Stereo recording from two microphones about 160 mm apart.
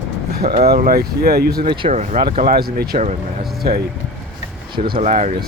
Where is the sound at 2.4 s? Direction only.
70° right (ahead or behind).